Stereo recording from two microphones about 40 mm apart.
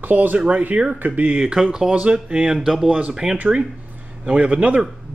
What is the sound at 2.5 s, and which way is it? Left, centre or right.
Speech, centre.